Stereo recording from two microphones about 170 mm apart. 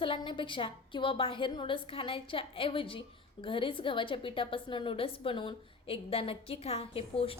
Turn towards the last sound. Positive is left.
turn(degrees=35)  # may be behind; listen again after turning